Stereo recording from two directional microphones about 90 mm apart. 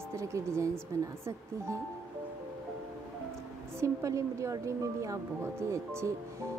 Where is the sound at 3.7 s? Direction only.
35° right (ahead or behind).